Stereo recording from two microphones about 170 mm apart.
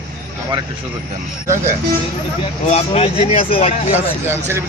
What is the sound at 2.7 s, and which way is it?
Speech, 35° left (ahead or behind).